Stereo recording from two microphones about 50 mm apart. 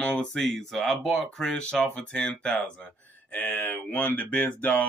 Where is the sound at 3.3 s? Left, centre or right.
Left.